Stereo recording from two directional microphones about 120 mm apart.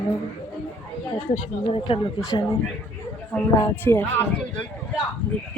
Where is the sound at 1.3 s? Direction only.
50° left (ahead or behind).